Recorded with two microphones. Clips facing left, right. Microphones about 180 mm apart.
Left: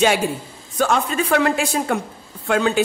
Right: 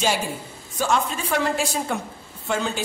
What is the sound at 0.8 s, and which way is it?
A woman's voice, 60° left (ahead or behind).